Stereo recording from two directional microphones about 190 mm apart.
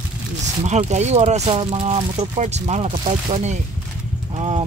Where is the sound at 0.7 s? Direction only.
35° right (ahead or behind).